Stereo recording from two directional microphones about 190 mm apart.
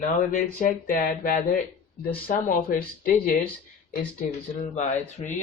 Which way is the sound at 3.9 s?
45° left (ahead or behind).